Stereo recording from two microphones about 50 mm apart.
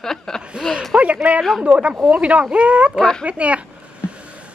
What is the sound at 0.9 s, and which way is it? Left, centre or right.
Speech, right.